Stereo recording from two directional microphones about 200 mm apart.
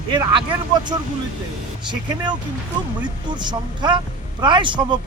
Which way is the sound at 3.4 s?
20° right (ahead or behind).